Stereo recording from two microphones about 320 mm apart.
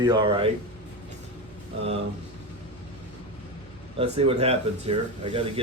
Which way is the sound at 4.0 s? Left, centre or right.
Centre.